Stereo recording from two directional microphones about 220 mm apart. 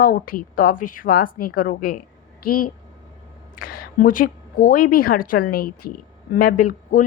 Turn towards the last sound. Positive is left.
turn(degrees=35)  # may be behind; listen again after turning